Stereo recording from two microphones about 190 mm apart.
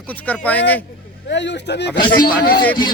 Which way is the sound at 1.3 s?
65° left (ahead or behind).